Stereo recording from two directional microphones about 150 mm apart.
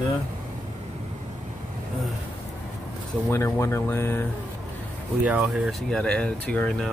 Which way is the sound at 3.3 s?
20° left (ahead or behind).